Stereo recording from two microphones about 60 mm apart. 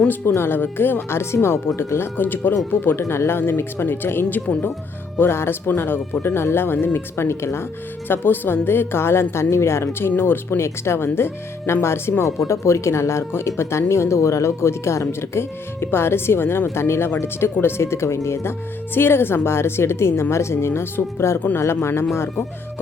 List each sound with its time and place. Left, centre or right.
0.1 s speech: left
3.0 s speech: left
10.2 s speech: left